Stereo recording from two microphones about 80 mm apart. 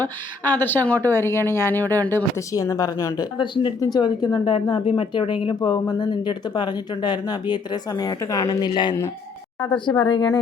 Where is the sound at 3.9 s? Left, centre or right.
Left.